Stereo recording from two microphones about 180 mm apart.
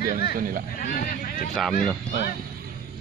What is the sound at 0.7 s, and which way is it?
Speech, 55° left (ahead or behind).